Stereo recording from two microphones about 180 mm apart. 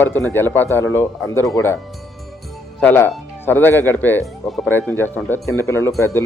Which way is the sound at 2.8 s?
10° left (ahead or behind).